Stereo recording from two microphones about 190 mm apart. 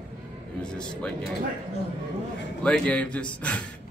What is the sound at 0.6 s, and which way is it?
Speech, 5° left (ahead or behind).